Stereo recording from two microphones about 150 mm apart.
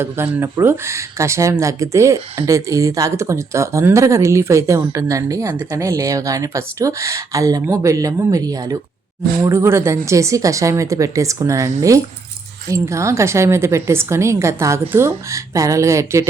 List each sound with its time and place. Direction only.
0.0 s speech: 15° right (ahead or behind)